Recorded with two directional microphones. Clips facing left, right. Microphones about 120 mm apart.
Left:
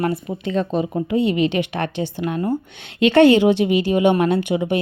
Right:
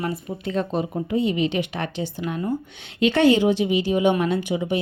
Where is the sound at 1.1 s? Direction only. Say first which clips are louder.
Left 3 dB; 70° left (ahead or behind).